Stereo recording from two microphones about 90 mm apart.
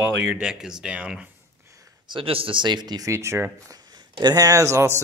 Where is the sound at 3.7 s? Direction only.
45° right (ahead or behind).